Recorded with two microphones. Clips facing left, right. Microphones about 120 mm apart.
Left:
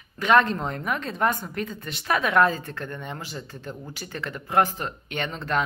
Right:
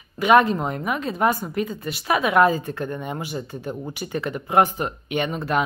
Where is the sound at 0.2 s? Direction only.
10° right (ahead or behind).